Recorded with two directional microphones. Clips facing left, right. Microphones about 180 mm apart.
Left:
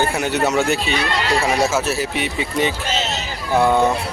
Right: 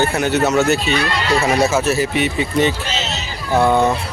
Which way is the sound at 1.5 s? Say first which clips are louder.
Right 3 dB; 10° left (ahead or behind).